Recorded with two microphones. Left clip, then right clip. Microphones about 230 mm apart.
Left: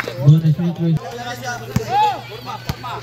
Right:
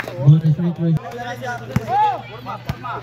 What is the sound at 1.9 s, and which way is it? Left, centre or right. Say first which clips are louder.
Chop: left 1 dB; left.